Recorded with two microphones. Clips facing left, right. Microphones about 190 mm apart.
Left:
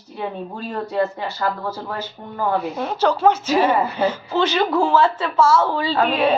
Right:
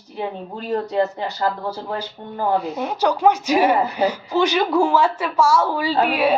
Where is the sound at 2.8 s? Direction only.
15° right (ahead or behind).